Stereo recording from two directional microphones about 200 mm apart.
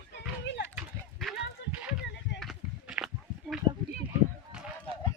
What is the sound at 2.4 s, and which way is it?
Run, centre (ahead or behind).